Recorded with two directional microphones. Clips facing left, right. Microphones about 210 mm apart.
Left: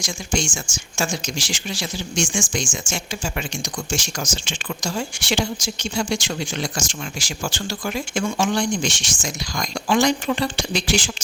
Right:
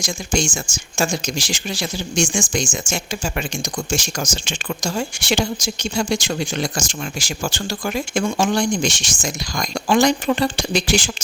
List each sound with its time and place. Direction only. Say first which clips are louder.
0.0 s speech: right 3 dB; 40° right (ahead or behind)